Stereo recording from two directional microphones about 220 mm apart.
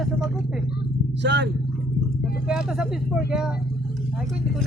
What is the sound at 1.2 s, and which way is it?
Speech, 50° right (ahead or behind).